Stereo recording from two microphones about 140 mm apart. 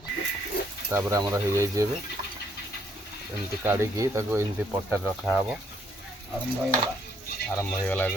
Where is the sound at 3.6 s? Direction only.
15° right (ahead or behind).